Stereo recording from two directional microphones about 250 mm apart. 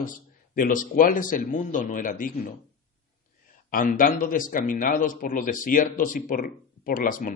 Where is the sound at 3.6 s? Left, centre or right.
Left.